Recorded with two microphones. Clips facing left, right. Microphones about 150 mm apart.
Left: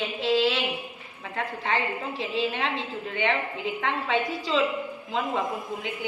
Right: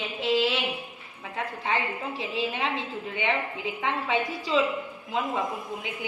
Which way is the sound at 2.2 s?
10° right (ahead or behind).